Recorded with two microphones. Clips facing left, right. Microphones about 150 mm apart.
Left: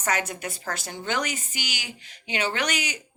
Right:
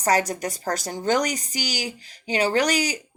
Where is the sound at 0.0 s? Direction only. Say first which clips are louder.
Right 6 dB; 35° right (ahead or behind).